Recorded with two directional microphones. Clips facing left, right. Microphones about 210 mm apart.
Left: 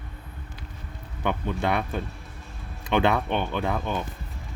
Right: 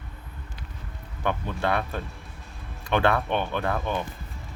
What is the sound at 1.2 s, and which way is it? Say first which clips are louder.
Speech: left 1 dB; 20° left (ahead or behind).